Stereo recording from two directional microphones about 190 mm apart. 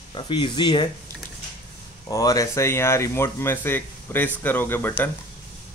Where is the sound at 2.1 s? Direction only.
20° left (ahead or behind).